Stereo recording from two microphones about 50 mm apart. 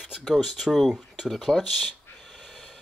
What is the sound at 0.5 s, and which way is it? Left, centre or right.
Speech, centre.